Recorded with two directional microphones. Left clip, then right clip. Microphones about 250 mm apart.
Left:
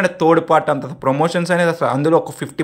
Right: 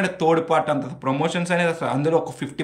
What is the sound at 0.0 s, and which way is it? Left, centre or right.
Speech, centre.